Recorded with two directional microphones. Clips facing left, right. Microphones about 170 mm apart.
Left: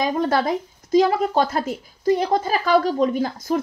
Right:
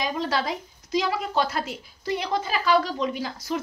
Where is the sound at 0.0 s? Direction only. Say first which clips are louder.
Left 6 dB; 50° left (ahead or behind).